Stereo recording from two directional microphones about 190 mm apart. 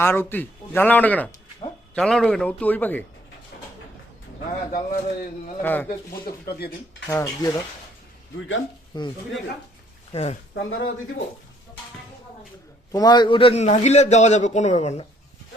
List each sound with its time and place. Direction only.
0.0 s speech: 10° left (ahead or behind)
4.7 s a man's voice: 50° left (ahead or behind)
5.6 s speech: 10° left (ahead or behind)
6.2 s speech: 55° left (ahead or behind)
7.1 s speech: 15° left (ahead or behind)
8.4 s speech: 90° left
8.9 s speech: 20° left (ahead or behind)
10.1 s speech: 35° left (ahead or behind)
10.5 s speech: 70° left (ahead or behind)
12.9 s a man's voice: 20° left (ahead or behind); by 15.0 s 35° left (ahead or behind)